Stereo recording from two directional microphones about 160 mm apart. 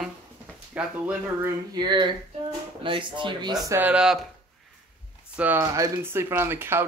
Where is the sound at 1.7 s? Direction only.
30° right (ahead or behind).